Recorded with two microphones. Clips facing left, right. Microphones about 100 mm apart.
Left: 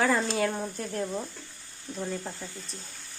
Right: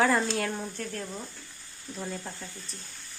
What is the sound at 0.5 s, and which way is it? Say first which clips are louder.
Speech: left 3 dB; 20° left (ahead or behind).